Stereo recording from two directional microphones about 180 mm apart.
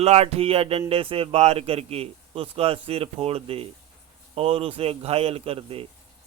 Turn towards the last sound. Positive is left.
turn(degrees=-30)  # may be behind; listen again after turning